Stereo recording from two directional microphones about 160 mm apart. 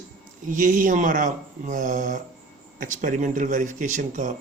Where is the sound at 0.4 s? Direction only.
55° right (ahead or behind).